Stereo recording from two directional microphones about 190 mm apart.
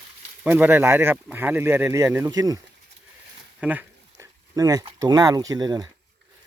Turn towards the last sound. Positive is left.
turn(degrees=-20)  # may be behind; listen again after turning